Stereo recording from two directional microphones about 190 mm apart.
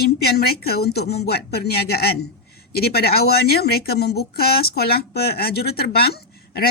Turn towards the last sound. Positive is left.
turn(degrees=55)  # may be behind; listen again after turning